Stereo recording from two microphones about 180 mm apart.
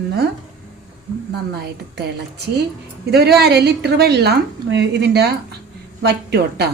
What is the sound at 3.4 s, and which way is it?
A woman's voice, 65° right (ahead or behind).